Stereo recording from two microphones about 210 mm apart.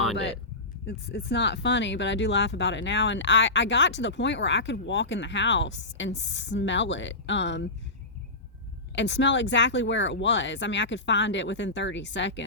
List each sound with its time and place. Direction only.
0.9 s speech: 50° left (ahead or behind)
9.0 s speech: 55° left (ahead or behind)